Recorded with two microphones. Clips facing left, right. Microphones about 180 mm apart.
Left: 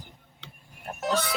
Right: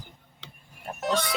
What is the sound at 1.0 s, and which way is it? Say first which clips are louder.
Speech: even; 5° left (ahead or behind).